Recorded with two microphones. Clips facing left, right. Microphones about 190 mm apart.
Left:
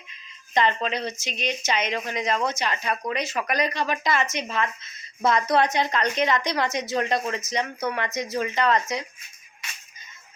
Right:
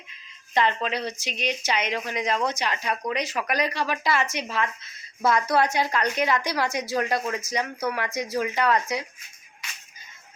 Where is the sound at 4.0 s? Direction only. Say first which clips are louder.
Even; 10° right (ahead or behind).